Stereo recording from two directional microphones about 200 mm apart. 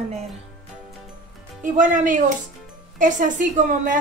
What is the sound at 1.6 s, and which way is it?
A woman's voice, 40° right (ahead or behind).